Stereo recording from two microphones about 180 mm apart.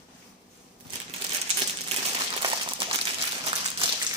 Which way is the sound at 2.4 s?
25° right (ahead or behind).